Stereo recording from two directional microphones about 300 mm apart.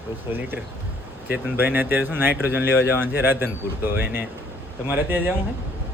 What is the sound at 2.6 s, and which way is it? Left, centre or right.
Speech, left.